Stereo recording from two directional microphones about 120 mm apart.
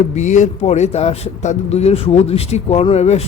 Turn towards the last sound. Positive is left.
turn(degrees=60)  # may be behind; listen again after turning